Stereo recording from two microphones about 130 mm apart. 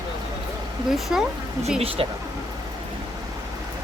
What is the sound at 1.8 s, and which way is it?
Speech, 45° right (ahead or behind).